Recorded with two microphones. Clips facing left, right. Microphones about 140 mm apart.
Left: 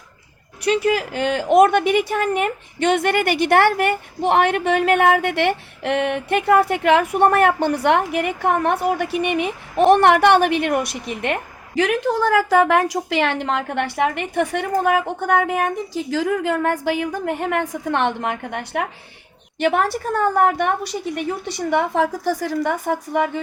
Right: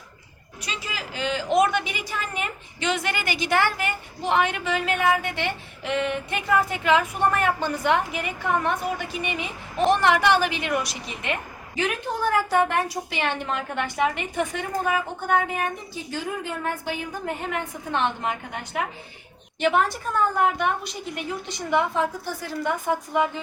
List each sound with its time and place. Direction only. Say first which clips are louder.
0.6 s a woman's voice: left 16 dB; 60° left (ahead or behind); by 22.5 s 90° left
22.6 s a woman's voice: left 3 dB; 55° left (ahead or behind)